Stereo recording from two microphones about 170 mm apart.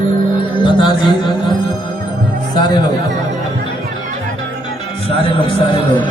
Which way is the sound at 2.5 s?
25° left (ahead or behind).